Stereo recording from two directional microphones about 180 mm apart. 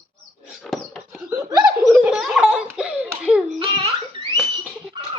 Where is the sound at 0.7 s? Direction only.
Centre (ahead or behind).